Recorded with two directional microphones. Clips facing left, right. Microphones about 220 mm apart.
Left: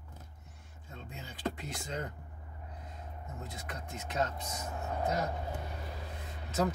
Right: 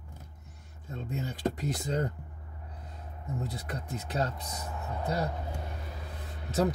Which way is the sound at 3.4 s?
35° right (ahead or behind).